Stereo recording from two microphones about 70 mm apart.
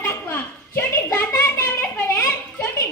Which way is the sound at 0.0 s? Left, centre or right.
Left.